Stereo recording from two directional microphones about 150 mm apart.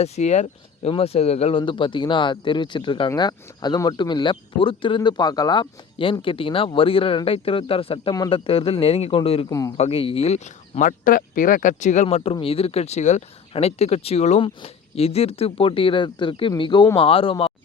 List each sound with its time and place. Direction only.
0.0 s speech: 50° left (ahead or behind)
9.5 s speech: 20° left (ahead or behind)
9.7 s speech: 40° left (ahead or behind)
12.0 s speech: 40° left (ahead or behind)